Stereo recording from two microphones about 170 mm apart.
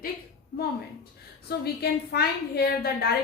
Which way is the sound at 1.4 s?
70° left (ahead or behind).